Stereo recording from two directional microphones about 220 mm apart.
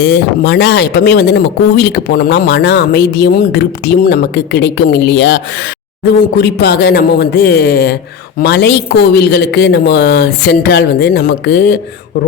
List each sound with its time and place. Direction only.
0.0 s speech: 50° left (ahead or behind)